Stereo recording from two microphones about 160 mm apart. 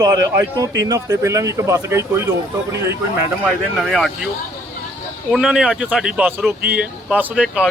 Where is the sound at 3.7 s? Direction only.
Centre (ahead or behind).